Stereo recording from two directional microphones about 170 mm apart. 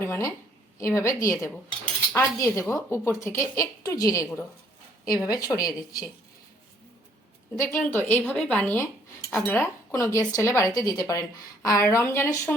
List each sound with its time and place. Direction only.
0.0 s a woman's voice: 15° left (ahead or behind)
7.6 s a woman's voice: 15° left (ahead or behind)